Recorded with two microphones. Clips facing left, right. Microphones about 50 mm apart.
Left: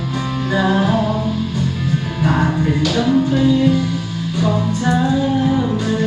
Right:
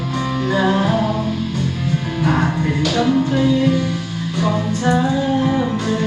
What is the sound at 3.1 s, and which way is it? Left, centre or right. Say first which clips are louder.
Music: left 2 dB; centre.